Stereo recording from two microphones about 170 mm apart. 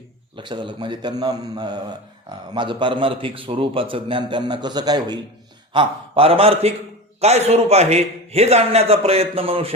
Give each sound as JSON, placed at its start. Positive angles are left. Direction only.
{"t": 0.3, "sound": "a man's voice", "side_deg": -30}